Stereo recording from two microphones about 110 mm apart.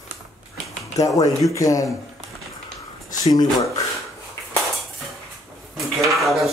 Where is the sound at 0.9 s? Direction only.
30° left (ahead or behind).